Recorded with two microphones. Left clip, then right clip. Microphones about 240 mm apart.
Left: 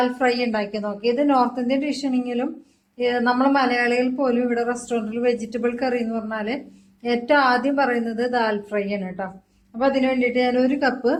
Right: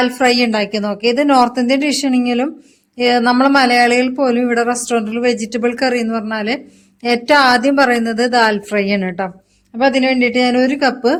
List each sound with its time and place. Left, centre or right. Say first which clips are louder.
0.0 s a woman's voice: right 7 dB; right